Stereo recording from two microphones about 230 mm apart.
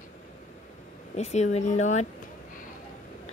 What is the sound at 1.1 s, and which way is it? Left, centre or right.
Speech, left.